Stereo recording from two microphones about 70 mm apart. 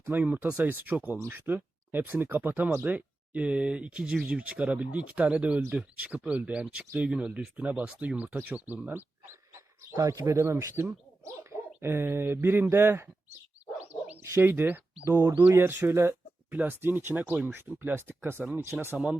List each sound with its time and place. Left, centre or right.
0.0 s speech: right
9.9 s speech: right
13.7 s dog: right
14.4 s speech: right
15.8 s a sound: right
16.6 s speech: right